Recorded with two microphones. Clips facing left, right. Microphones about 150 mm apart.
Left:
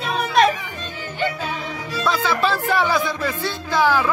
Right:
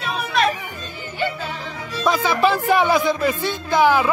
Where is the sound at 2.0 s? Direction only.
15° right (ahead or behind).